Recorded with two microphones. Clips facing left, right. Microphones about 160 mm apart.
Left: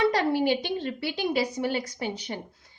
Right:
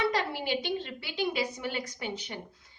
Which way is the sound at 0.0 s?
40° left (ahead or behind).